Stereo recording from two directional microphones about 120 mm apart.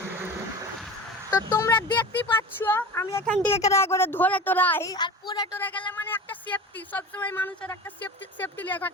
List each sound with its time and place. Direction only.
1.3 s speech: 25° left (ahead or behind)
1.9 s a woman's voice: 15° left (ahead or behind)
4.9 s speech: 35° left (ahead or behind)
5.5 s speech: 15° left (ahead or behind)